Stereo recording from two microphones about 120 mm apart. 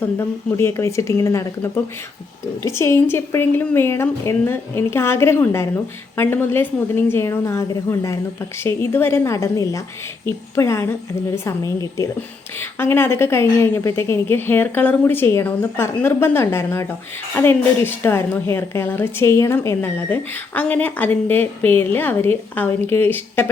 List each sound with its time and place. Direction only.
0.2 s speech: 20° left (ahead or behind)